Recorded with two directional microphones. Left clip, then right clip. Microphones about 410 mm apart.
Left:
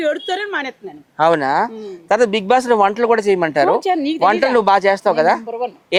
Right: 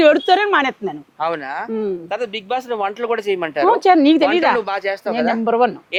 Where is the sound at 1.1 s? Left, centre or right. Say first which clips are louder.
Left 10 dB; left.